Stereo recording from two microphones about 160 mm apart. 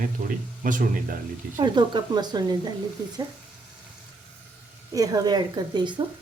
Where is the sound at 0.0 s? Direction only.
55° right (ahead or behind).